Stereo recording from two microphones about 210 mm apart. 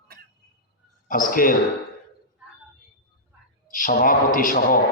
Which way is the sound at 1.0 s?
40° left (ahead or behind).